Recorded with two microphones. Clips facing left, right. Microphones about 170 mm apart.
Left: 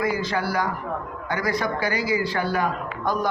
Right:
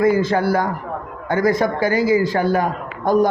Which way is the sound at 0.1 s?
50° right (ahead or behind).